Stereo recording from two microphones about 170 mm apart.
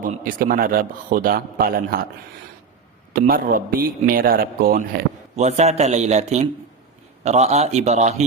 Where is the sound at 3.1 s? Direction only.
60° right (ahead or behind).